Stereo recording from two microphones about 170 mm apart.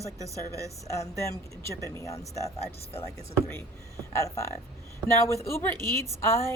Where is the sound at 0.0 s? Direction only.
20° right (ahead or behind).